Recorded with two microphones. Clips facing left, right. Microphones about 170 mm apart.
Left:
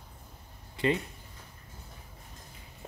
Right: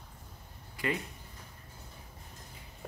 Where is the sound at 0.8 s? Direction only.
25° left (ahead or behind).